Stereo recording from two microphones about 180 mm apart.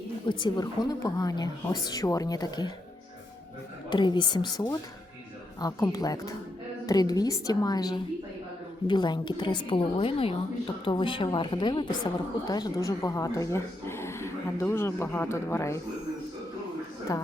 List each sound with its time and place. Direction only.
0.3 s a woman's voice: 25° left (ahead or behind)
3.8 s a woman's voice: 25° left (ahead or behind)
17.1 s a woman's voice: 20° left (ahead or behind)